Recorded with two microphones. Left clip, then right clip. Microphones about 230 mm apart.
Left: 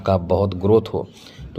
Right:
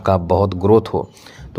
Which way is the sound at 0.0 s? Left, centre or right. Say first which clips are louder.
Right 3 dB; right.